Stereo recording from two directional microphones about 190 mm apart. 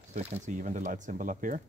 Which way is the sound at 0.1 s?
35° right (ahead or behind).